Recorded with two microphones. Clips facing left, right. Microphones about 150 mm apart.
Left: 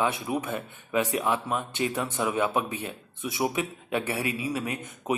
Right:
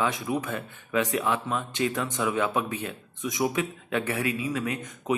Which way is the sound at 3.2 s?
30° left (ahead or behind).